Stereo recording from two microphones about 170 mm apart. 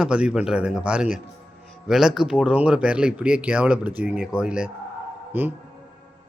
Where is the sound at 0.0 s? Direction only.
5° right (ahead or behind).